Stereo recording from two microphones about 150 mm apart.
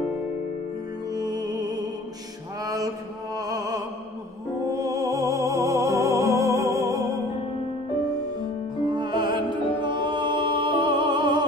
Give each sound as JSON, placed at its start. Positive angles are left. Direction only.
{"t": 1.1, "sound": "music", "side_deg": -25}
{"t": 2.6, "sound": "mantra", "side_deg": -25}
{"t": 3.3, "sound": "music", "side_deg": -25}
{"t": 8.8, "sound": "music", "side_deg": -30}